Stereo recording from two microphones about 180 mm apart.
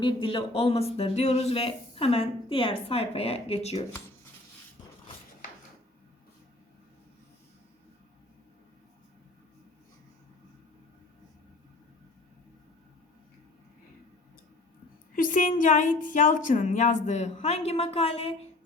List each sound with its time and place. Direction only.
0.0 s speech: 25° left (ahead or behind)
15.1 s speech: 50° left (ahead or behind)